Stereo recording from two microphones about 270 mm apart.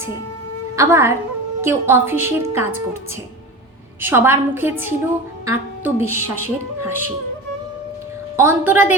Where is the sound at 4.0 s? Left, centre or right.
Centre.